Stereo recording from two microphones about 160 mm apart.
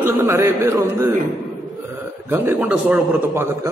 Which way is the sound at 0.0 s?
15° right (ahead or behind).